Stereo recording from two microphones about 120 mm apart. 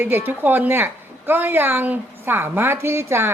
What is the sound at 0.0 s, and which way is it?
A woman's voice, 15° right (ahead or behind).